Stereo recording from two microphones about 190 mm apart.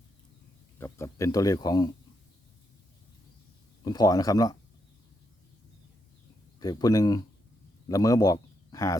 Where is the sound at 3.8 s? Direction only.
20° left (ahead or behind).